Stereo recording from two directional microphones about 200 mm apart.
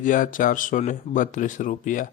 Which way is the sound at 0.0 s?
40° left (ahead or behind).